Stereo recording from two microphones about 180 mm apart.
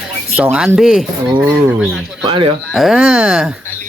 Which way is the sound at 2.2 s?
30° right (ahead or behind).